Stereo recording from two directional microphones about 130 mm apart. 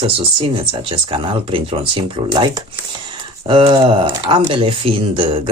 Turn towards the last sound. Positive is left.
turn(degrees=-45)  # may be behind; listen again after turning